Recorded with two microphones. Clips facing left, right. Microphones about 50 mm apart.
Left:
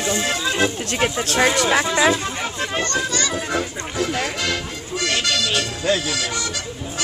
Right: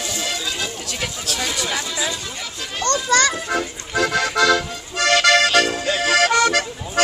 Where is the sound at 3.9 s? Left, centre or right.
Right.